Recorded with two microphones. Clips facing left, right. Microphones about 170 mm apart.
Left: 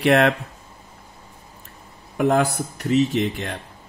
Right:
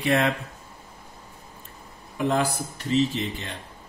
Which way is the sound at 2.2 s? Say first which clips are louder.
Left 5 dB; 65° left (ahead or behind).